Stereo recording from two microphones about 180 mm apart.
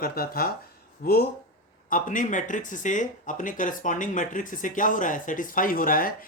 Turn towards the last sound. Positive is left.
turn(degrees=50)  # may be behind; listen again after turning